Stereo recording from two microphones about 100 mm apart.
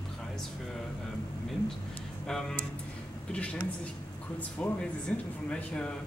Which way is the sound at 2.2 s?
5° left (ahead or behind).